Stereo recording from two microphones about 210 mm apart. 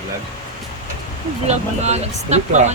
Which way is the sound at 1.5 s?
30° right (ahead or behind).